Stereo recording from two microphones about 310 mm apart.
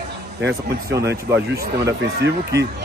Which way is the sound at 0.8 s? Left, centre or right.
Centre.